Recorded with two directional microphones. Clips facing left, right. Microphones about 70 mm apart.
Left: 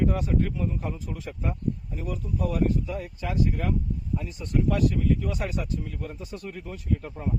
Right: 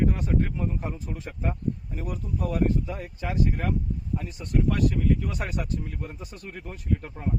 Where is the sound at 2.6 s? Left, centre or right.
Right.